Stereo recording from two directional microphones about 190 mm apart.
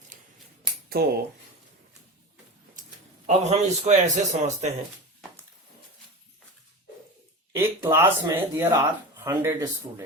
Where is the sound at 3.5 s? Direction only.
35° right (ahead or behind).